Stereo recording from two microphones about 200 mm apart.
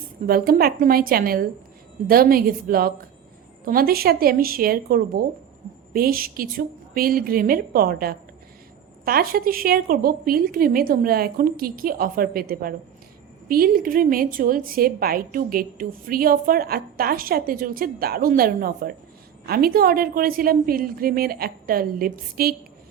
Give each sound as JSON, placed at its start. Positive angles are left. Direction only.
{"t": 0.3, "sound": "a woman's voice", "side_deg": -50}